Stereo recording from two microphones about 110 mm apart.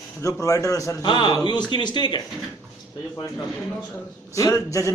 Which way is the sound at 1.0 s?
45° left (ahead or behind).